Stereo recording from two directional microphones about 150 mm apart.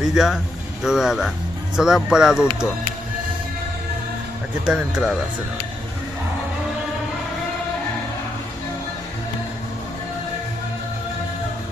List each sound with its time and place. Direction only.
0.0 s speech: centre (ahead or behind)
4.6 s speech: 5° right (ahead or behind)